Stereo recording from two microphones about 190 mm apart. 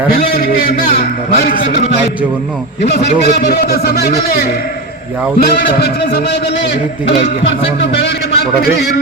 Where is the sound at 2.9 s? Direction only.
60° left (ahead or behind).